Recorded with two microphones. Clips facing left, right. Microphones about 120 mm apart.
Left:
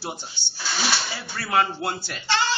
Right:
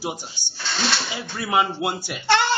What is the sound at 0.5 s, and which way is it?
Speech, 5° left (ahead or behind).